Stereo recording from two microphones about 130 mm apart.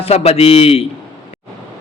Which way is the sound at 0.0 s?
50° left (ahead or behind).